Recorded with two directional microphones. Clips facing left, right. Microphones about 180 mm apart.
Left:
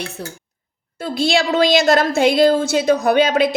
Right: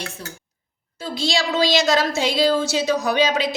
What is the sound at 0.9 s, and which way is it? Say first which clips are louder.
A woman's voice: left 6 dB; 55° left (ahead or behind).